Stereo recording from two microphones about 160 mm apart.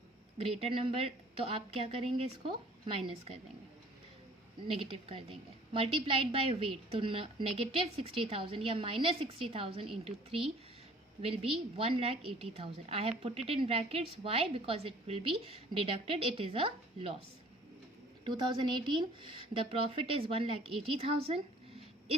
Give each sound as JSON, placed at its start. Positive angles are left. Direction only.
{"t": 0.3, "sound": "a woman's voice", "side_deg": -40}
{"t": 4.6, "sound": "a woman's voice", "side_deg": -35}
{"t": 18.3, "sound": "a woman's voice", "side_deg": -30}